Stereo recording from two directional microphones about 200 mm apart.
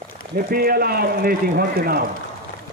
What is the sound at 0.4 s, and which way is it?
A man's voice, 45° right (ahead or behind).